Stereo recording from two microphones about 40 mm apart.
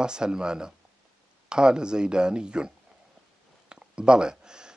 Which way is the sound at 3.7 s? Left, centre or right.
Right.